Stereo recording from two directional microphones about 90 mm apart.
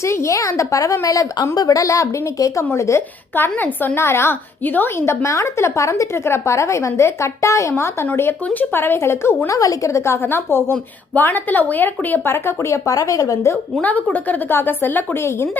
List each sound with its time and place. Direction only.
0.0 s a woman's voice: 35° left (ahead or behind)
3.3 s a woman's voice: 20° left (ahead or behind)
13.8 s a woman's voice: 20° left (ahead or behind)